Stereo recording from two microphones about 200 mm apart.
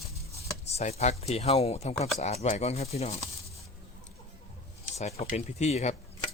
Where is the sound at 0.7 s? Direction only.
35° left (ahead or behind).